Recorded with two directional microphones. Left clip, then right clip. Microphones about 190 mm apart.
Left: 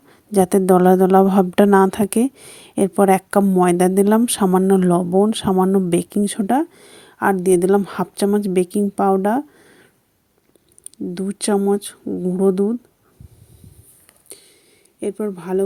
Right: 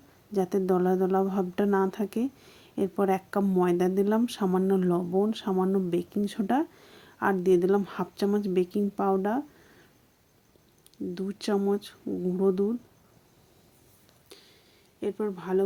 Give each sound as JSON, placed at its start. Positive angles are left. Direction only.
{"t": 0.3, "sound": "a woman's voice", "side_deg": 45}
{"t": 10.9, "sound": "speech", "side_deg": 40}
{"t": 15.0, "sound": "speech", "side_deg": 35}